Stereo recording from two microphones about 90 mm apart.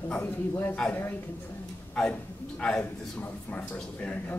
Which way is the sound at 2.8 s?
20° left (ahead or behind).